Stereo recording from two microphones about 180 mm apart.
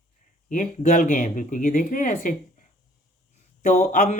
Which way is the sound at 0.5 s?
45° left (ahead or behind).